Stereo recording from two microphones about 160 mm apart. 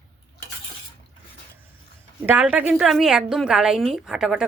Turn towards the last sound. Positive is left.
turn(degrees=-5)  # may be behind; listen again after turning